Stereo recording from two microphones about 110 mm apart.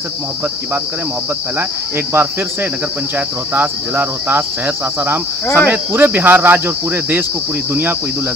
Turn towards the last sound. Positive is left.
turn(degrees=-20)  # may be behind; listen again after turning